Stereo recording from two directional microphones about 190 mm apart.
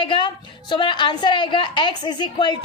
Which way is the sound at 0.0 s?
25° left (ahead or behind).